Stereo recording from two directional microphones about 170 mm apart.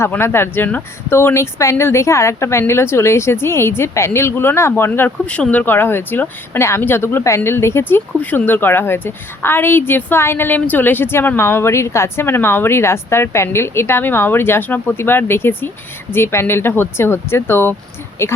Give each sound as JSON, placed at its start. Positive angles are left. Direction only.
{"t": 0.0, "sound": "speech", "side_deg": 15}